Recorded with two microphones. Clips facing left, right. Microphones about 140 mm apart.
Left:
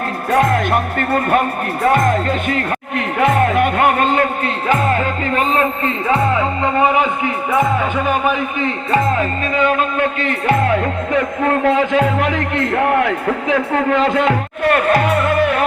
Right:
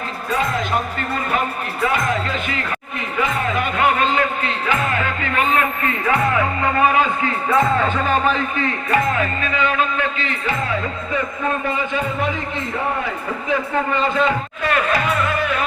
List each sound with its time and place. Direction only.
0.3 s speech: 60° left (ahead or behind)
3.2 s music: 65° left (ahead or behind); by 9.0 s 20° left (ahead or behind)
9.1 s music: 40° left (ahead or behind); by 15.6 s 60° left (ahead or behind)